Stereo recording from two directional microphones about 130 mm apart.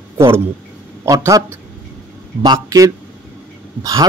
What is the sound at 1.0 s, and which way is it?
Speech, 25° right (ahead or behind).